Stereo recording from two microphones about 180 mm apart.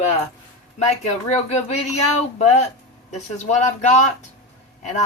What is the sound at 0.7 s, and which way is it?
Speech, 40° left (ahead or behind).